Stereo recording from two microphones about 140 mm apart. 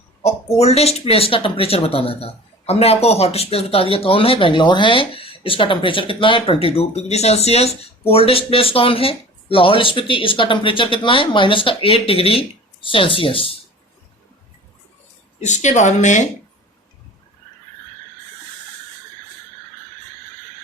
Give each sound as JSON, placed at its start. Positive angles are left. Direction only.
{"t": 0.6, "sound": "speech", "side_deg": 50}
{"t": 15.4, "sound": "speech", "side_deg": 60}